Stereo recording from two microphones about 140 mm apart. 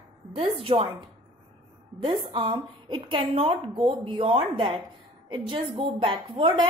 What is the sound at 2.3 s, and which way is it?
A woman's voice, 35° right (ahead or behind).